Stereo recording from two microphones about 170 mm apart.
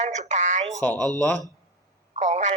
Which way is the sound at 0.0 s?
45° right (ahead or behind).